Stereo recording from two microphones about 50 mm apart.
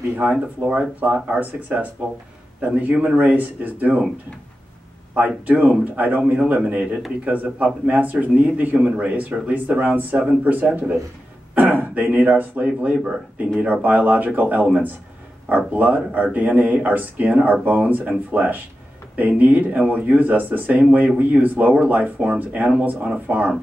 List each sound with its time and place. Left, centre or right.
0.1 s speech: right
5.2 s speech: right